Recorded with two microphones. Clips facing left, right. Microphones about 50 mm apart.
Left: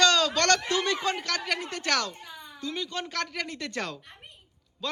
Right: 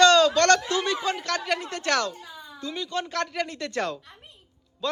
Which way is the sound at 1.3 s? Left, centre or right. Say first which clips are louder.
Right 3 dB; right.